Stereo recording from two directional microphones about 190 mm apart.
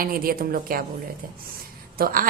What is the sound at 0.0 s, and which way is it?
Speech, 50° right (ahead or behind).